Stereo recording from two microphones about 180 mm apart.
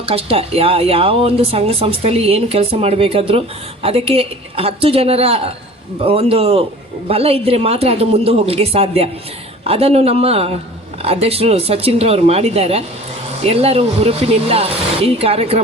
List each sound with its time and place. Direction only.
0.0 s speech: 30° right (ahead or behind)